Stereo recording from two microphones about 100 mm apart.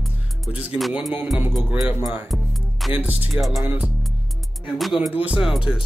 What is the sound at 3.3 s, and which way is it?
Speech, centre (ahead or behind).